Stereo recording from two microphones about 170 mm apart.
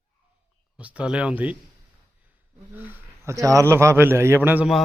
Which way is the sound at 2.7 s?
10° right (ahead or behind).